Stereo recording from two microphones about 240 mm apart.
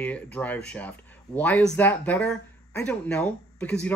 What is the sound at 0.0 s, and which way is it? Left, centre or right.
Speech, centre.